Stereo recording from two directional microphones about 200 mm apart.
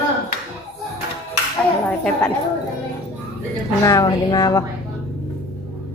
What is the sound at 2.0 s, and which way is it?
Speech, 5° left (ahead or behind).